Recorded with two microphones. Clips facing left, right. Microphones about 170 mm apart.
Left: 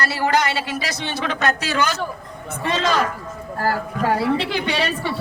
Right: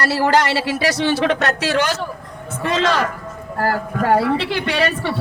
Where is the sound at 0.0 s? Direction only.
75° right (ahead or behind).